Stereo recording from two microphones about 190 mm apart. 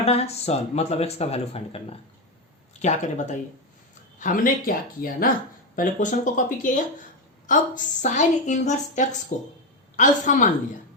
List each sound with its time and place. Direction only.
0.0 s speech: 35° left (ahead or behind)